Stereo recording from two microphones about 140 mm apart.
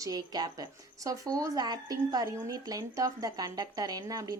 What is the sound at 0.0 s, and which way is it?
Speech, 30° right (ahead or behind).